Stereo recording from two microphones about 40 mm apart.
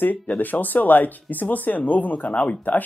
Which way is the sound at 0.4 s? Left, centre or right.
Left.